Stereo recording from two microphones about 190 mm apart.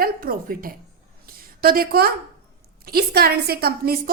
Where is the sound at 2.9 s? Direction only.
55° right (ahead or behind).